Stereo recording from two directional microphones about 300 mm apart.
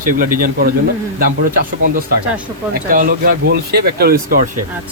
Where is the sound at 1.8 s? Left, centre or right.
Right.